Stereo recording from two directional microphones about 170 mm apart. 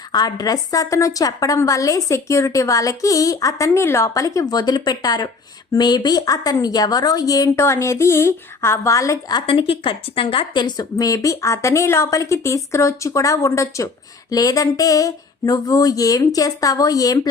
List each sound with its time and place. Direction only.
0.1 s a woman's voice: 25° left (ahead or behind)
9.5 s a woman's voice: 30° left (ahead or behind)